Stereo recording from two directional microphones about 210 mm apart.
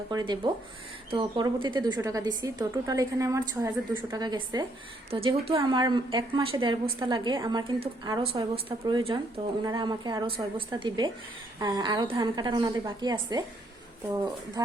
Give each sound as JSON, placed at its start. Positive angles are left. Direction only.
{"t": 0.1, "sound": "a woman's voice", "side_deg": -20}